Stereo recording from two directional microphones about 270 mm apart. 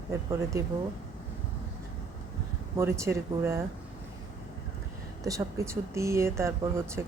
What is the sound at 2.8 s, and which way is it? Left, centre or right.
Speech, centre.